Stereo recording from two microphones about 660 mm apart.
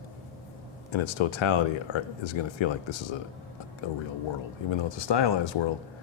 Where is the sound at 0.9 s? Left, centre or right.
Left.